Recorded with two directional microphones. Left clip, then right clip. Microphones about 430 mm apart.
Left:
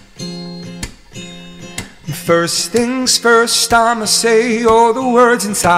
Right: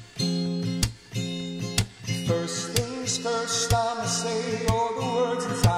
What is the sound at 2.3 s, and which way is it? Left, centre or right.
Music, left.